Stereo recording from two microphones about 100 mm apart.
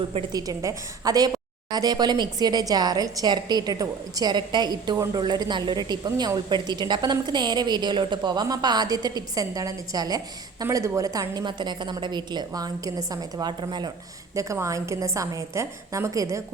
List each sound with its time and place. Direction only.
0.3 s a woman's voice: 35° right (ahead or behind)
11.4 s a woman's voice: 50° right (ahead or behind)
13.6 s a woman's voice: 50° right (ahead or behind)
14.3 s a woman's voice: 30° right (ahead or behind)